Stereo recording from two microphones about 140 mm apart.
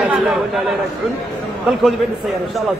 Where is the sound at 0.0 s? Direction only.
5° right (ahead or behind).